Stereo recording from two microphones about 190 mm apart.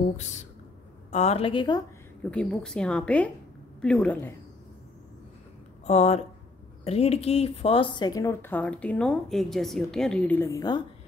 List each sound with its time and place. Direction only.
0.2 s a woman's voice: 40° left (ahead or behind)
2.3 s a woman's voice: 5° left (ahead or behind)
5.9 s speech: 35° left (ahead or behind); by 10.8 s 20° left (ahead or behind)